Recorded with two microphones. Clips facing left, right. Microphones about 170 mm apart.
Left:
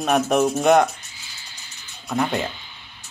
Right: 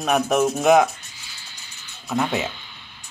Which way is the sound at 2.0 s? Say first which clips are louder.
Even; centre (ahead or behind).